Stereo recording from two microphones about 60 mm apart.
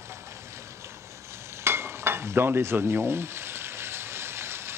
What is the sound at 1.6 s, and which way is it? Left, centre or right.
Sizzle, right.